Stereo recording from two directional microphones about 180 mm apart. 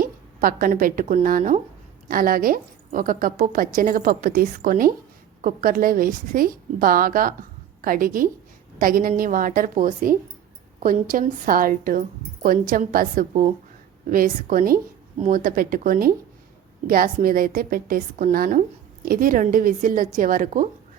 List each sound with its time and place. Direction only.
0.0 s a woman's voice: 50° right (ahead or behind)